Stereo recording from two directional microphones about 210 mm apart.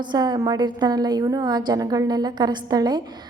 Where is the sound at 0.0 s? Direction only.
20° right (ahead or behind).